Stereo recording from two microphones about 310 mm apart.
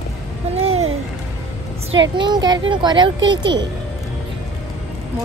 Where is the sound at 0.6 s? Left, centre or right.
Right.